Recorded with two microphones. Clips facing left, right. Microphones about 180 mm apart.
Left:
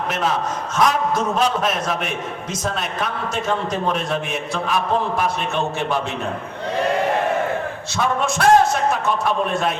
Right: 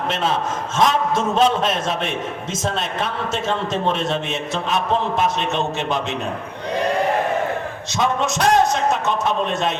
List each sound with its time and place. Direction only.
0.1 s a man's voice: 25° right (ahead or behind)
7.9 s a man's voice: 20° right (ahead or behind)